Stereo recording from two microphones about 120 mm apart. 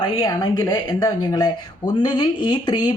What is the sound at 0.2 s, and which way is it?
Speech, 35° left (ahead or behind).